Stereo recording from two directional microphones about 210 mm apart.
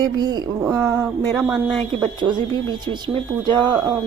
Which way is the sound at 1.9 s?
20° right (ahead or behind).